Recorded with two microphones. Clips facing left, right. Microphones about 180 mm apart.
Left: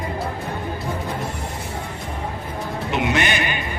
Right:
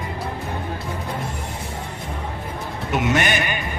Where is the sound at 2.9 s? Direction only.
45° right (ahead or behind).